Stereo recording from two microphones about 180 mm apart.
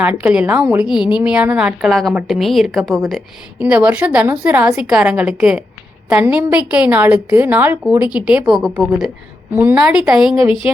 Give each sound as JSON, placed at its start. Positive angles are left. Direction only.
{"t": 0.0, "sound": "a woman's voice", "side_deg": -10}